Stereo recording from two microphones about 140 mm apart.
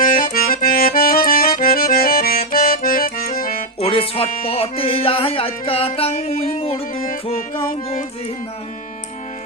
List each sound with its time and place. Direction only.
0.0 s accordion: 75° left (ahead or behind); by 3.6 s 90° left
3.8 s music: 40° left (ahead or behind)
6.9 s music: 90° left